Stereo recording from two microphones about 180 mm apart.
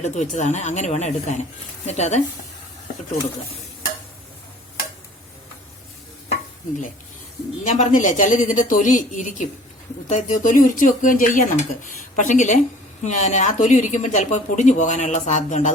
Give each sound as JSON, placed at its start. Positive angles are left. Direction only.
{"t": 0.0, "sound": "speech", "side_deg": 40}
{"t": 7.6, "sound": "speech", "side_deg": 45}